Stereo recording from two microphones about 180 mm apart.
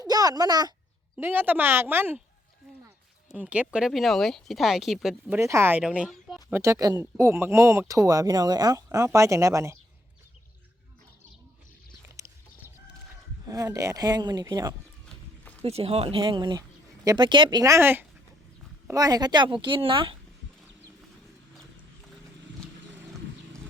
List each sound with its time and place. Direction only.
0.0 s a sound: 20° right (ahead or behind)
1.1 s speech: 10° right (ahead or behind)
3.3 s speech: 5° right (ahead or behind)
5.4 s speech: 15° right (ahead or behind)
6.5 s speech: 15° right (ahead or behind)
12.1 s a sound: 15° right (ahead or behind)
13.4 s speech: 20° right (ahead or behind)
15.6 s speech: 35° right (ahead or behind)